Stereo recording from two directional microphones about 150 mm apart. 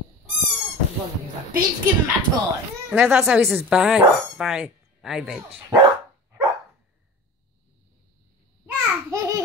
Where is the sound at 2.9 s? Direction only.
5° right (ahead or behind).